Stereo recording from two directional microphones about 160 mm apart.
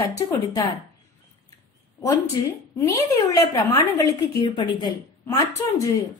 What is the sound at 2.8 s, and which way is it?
A woman's voice, 20° left (ahead or behind).